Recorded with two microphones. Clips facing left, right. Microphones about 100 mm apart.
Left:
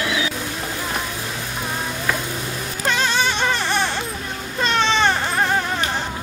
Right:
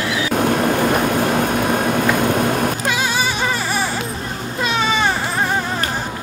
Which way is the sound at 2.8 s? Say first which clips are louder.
Right 1 dB; 10° right (ahead or behind).